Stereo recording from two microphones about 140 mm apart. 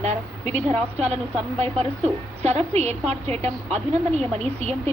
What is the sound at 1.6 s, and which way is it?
A woman's voice, 50° right (ahead or behind).